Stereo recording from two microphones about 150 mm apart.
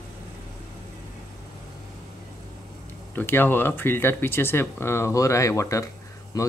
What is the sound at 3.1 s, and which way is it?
Speech, 15° left (ahead or behind).